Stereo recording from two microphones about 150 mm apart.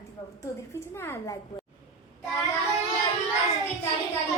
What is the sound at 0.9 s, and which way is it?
Speech, 15° left (ahead or behind).